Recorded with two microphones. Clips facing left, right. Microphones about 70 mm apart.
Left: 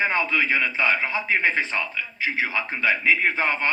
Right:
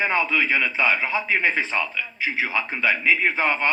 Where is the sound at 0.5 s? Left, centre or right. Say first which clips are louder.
Right 1 dB; right.